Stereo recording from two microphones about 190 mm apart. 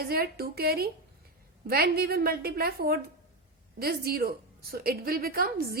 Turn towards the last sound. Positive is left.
turn(degrees=-50)  # may be behind; listen again after turning